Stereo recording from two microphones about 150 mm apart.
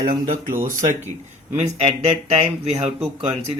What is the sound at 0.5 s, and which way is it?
Speech, 20° right (ahead or behind).